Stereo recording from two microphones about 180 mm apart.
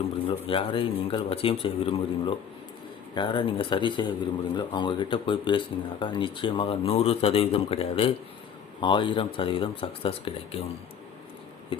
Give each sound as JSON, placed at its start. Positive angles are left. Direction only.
{"t": 0.3, "sound": "speech", "side_deg": 30}
{"t": 11.7, "sound": "speech", "side_deg": 30}